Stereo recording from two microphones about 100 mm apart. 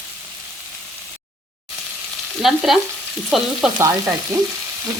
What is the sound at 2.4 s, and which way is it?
Stir, centre (ahead or behind).